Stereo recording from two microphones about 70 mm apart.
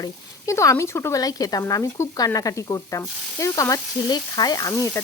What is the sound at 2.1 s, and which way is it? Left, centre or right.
Frying, left.